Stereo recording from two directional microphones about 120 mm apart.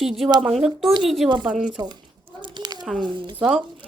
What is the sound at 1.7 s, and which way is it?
Speech, 35° right (ahead or behind).